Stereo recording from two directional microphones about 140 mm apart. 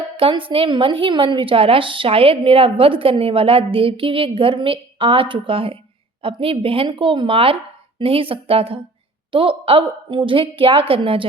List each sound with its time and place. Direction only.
0.2 s a woman's voice: 40° right (ahead or behind)